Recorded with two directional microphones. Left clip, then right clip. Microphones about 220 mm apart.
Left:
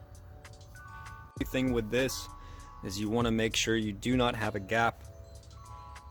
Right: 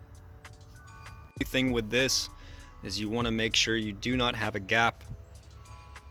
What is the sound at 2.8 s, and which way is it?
Speech, 10° left (ahead or behind).